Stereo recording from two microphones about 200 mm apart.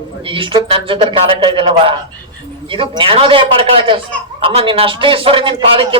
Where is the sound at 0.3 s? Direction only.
25° right (ahead or behind).